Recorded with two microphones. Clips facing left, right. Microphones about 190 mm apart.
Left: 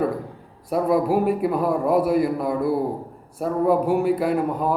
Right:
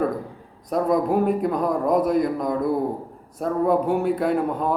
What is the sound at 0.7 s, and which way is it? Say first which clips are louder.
A man's voice: left 1 dB; 5° left (ahead or behind).